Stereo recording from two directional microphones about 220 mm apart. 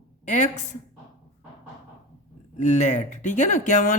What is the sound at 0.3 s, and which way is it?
Speech, 35° left (ahead or behind).